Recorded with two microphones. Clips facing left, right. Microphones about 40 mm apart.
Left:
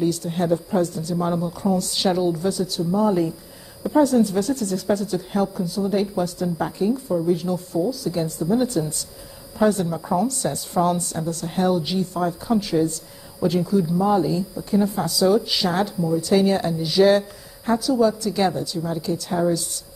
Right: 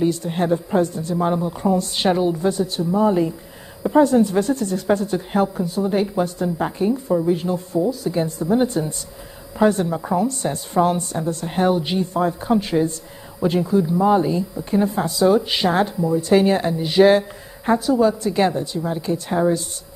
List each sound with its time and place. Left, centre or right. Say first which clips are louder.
0.0 s a woman's voice: right 2 dB; right